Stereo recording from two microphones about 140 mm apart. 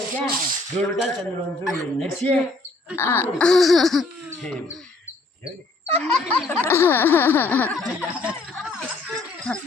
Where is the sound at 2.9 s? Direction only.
20° left (ahead or behind).